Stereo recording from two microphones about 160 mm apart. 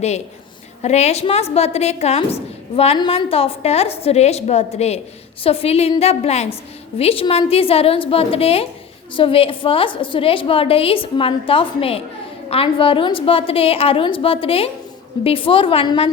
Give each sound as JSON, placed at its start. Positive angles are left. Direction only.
{"t": 0.8, "sound": "a woman's voice", "side_deg": 45}